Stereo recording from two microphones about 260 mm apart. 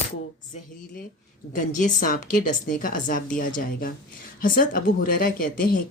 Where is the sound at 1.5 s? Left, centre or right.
Left.